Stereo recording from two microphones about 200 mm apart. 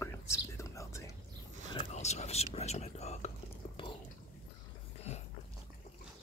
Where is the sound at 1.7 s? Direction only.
30° left (ahead or behind).